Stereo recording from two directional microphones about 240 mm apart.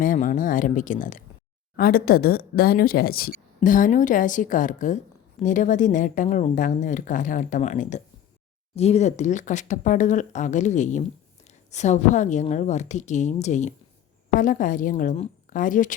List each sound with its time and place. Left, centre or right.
0.0 s a woman's voice: left